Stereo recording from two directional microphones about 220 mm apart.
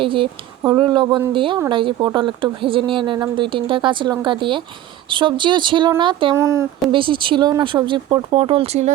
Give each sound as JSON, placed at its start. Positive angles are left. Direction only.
{"t": 0.0, "sound": "speech", "side_deg": -25}